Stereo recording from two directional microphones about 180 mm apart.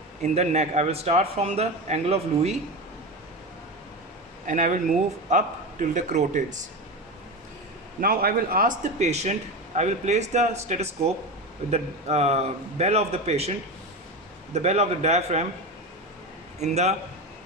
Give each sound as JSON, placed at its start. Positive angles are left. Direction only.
{"t": 0.2, "sound": "speech", "side_deg": -40}
{"t": 4.4, "sound": "a man's voice", "side_deg": -45}
{"t": 8.0, "sound": "a man's voice", "side_deg": -55}
{"t": 14.5, "sound": "speech", "side_deg": -40}
{"t": 16.6, "sound": "speech", "side_deg": -40}